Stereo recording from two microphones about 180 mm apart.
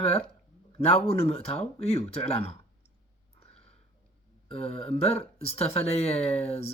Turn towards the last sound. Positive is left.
turn(degrees=35)  # may be behind; listen again after turning